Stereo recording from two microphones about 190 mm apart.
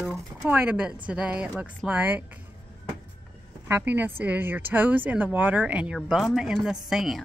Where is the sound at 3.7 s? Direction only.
10° right (ahead or behind).